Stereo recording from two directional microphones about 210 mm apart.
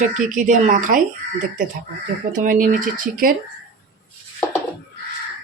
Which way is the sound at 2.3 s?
40° right (ahead or behind).